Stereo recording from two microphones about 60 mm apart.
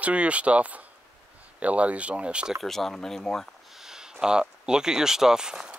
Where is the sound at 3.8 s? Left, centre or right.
Centre.